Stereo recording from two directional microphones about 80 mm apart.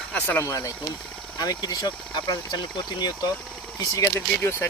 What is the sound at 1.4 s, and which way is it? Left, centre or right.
Speech, left.